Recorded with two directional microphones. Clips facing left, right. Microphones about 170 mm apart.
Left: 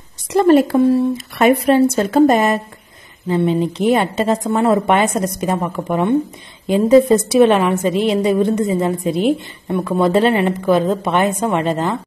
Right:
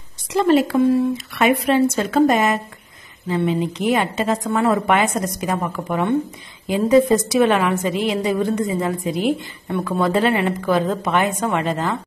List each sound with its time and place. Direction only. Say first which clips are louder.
0.3 s a woman's voice: left 4 dB; 45° left (ahead or behind); by 12.0 s 30° left (ahead or behind)